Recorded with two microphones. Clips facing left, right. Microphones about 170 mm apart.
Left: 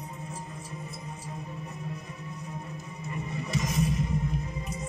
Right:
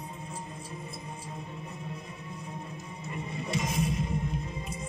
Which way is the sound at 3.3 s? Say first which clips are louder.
Left 1 dB; 30° right (ahead or behind).